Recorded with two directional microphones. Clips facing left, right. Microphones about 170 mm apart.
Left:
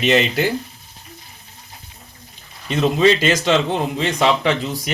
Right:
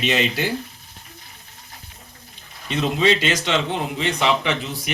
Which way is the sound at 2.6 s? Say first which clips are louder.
Left 4 dB; 40° left (ahead or behind).